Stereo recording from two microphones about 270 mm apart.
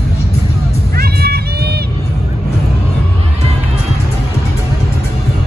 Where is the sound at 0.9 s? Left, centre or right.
Right.